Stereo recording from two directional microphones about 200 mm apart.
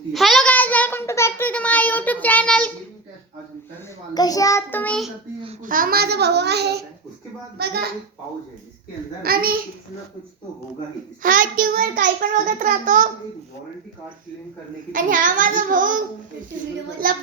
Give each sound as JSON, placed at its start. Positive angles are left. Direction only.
{"t": 0.1, "sound": "a sound", "side_deg": 0}
{"t": 4.1, "sound": "child singing", "side_deg": 20}
{"t": 5.6, "sound": "a child's voice", "side_deg": -45}
{"t": 9.2, "sound": "a child's voice", "side_deg": -50}
{"t": 11.2, "sound": "a child's voice", "side_deg": -40}
{"t": 14.9, "sound": "a child's voice", "side_deg": -45}
{"t": 17.0, "sound": "a child's voice", "side_deg": -45}